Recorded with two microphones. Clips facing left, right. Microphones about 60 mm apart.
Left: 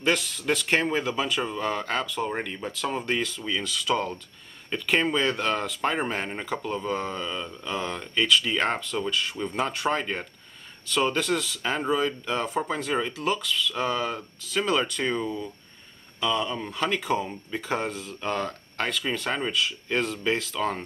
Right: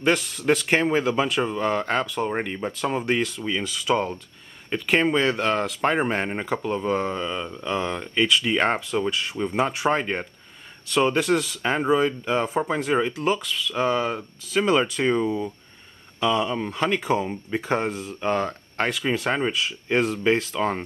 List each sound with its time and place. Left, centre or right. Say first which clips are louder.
0.0 s speech: right 3 dB; centre
2.2 s speech: right 4 dB; centre
2.9 s speech: right 4 dB; centre
6.4 s speech: right 4 dB; centre
7.7 s speech: right 3 dB; centre
9.8 s speech: right 4 dB; centre
10.9 s speech: right 4 dB; centre